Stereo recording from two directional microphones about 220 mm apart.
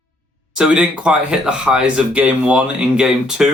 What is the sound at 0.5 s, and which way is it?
Speech, 5° right (ahead or behind).